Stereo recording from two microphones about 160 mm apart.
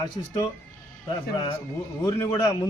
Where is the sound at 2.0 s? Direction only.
20° left (ahead or behind).